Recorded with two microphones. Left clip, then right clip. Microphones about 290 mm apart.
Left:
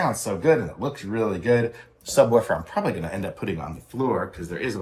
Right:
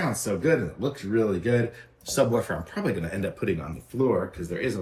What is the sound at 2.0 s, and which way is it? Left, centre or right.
Speech, centre.